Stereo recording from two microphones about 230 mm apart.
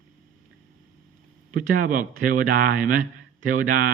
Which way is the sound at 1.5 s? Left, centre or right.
Right.